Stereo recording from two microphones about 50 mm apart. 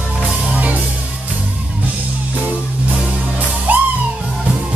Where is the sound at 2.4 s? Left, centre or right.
Right.